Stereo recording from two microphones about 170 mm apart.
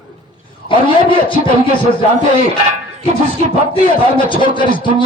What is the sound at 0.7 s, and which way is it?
Speech, 30° left (ahead or behind).